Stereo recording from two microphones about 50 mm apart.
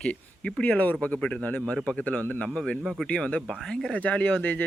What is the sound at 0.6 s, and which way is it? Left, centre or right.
Speech, left.